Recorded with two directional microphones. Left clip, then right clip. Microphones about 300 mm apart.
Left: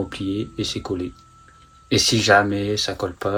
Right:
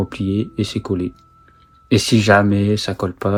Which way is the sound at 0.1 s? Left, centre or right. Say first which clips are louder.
Right 4 dB; right.